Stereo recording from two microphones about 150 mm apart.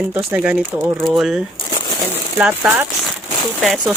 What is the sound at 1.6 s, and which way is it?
Crumpling, 25° left (ahead or behind).